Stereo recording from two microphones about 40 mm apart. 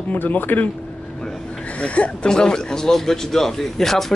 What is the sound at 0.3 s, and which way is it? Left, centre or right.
Speech, left.